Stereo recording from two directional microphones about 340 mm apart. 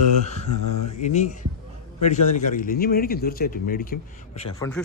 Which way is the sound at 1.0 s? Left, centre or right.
Centre.